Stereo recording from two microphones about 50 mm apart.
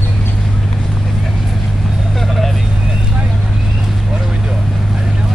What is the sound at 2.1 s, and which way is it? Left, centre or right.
Vehicle, centre.